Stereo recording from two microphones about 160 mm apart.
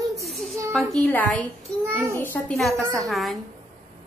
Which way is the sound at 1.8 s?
15° right (ahead or behind).